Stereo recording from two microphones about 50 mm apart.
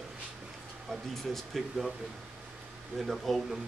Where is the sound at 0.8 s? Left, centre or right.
Centre.